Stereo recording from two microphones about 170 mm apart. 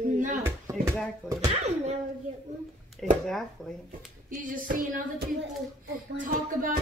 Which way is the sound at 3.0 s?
Centre (ahead or behind).